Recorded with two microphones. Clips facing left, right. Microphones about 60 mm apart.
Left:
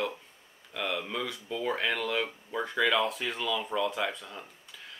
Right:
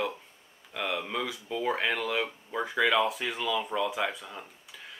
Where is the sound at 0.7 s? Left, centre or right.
Centre.